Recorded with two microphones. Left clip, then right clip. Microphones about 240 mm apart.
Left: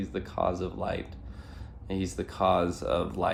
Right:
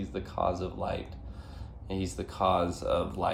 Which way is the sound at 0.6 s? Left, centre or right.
Left.